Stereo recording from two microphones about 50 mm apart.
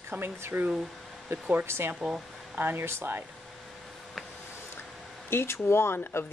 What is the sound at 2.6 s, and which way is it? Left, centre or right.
Speech, right.